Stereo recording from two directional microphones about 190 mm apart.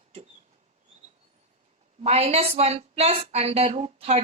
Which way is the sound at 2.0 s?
30° right (ahead or behind).